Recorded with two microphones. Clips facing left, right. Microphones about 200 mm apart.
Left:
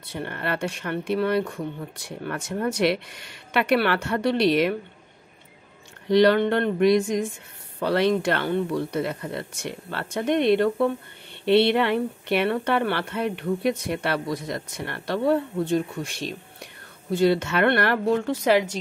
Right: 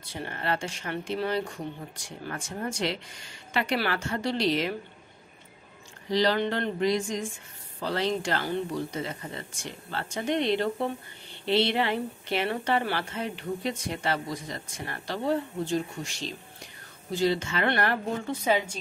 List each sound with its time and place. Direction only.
0.0 s a woman's voice: 60° left (ahead or behind)
6.0 s a woman's voice: 65° left (ahead or behind)